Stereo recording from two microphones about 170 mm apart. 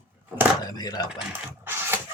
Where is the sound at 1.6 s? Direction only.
15° right (ahead or behind).